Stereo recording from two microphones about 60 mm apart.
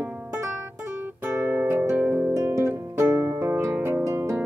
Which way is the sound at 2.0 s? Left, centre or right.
Right.